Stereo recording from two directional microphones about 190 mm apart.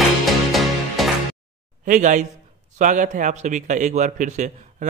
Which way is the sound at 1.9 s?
40° right (ahead or behind).